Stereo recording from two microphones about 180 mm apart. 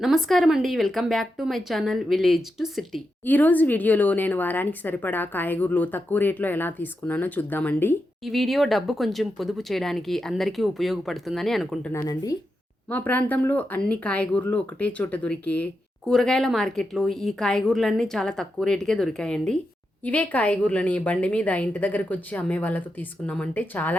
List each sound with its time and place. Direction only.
0.0 s a woman's voice: centre (ahead or behind)
12.0 s speech: 20° left (ahead or behind)
12.9 s a woman's voice: 10° left (ahead or behind)